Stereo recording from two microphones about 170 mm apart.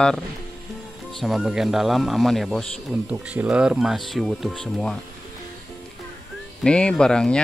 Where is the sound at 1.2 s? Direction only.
Centre (ahead or behind).